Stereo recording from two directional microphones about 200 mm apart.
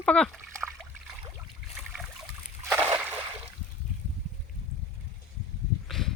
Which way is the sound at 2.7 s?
10° right (ahead or behind).